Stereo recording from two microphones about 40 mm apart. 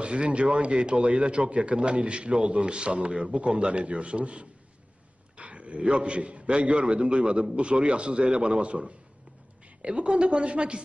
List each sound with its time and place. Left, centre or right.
0.0 s a man's voice: right